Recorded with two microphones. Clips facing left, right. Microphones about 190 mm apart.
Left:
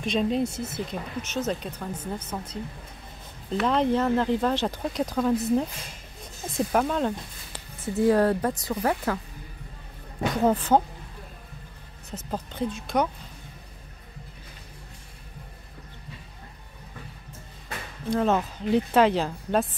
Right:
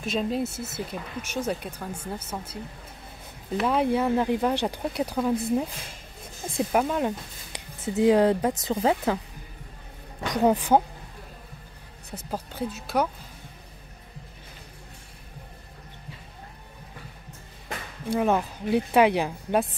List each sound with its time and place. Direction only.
0.0 s speech: 5° right (ahead or behind)
6.5 s speech: 5° right (ahead or behind)
10.3 s speech: 15° right (ahead or behind)
12.1 s speech: 10° right (ahead or behind)
18.0 s speech: 10° right (ahead or behind)